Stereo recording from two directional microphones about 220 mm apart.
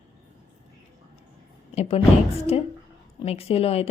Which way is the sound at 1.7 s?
25° left (ahead or behind).